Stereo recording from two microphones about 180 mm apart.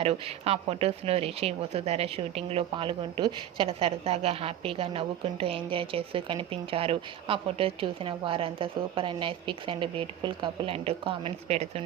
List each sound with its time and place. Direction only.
0.0 s speech: 35° right (ahead or behind)